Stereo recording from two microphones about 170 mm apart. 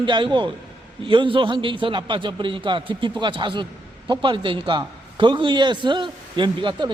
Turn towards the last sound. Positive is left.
turn(degrees=-30)  # may be behind; listen again after turning